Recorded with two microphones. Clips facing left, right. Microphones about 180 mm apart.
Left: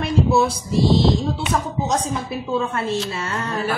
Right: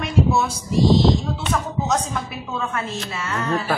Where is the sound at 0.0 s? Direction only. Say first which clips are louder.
Left 2 dB; 35° left (ahead or behind).